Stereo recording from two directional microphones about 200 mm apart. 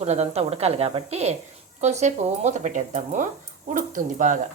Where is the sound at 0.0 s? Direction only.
35° right (ahead or behind).